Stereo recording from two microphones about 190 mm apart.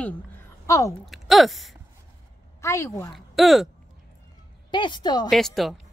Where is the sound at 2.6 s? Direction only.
15° left (ahead or behind).